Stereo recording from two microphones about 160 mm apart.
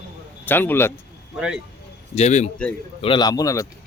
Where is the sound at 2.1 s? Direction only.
45° left (ahead or behind).